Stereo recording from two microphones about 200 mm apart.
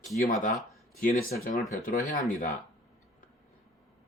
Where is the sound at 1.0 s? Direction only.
40° left (ahead or behind).